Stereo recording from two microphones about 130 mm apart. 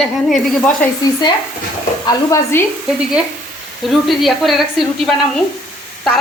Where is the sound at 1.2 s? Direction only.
35° left (ahead or behind).